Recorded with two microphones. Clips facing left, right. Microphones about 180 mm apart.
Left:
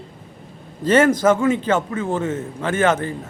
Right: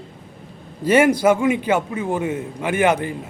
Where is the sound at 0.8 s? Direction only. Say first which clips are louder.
Even; 10° right (ahead or behind).